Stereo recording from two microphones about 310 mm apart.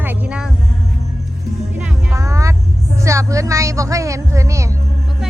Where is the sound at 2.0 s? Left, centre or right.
Centre.